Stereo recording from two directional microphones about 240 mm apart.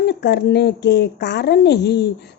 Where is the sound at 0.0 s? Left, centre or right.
Left.